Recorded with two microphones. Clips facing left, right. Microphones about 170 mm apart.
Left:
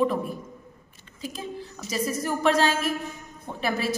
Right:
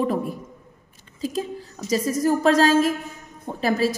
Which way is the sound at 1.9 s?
40° right (ahead or behind).